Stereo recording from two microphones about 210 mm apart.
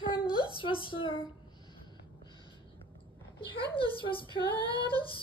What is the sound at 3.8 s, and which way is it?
Speech, 25° left (ahead or behind).